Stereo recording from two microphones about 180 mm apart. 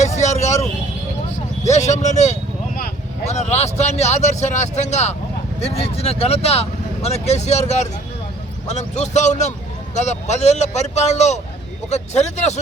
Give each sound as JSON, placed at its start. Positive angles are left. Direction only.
{"t": 0.0, "sound": "vehicle", "side_deg": 40}
{"t": 1.6, "sound": "speech", "side_deg": 40}
{"t": 8.6, "sound": "speech", "side_deg": 40}